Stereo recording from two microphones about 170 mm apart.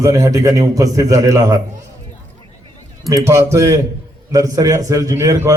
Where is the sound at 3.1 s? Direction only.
20° right (ahead or behind).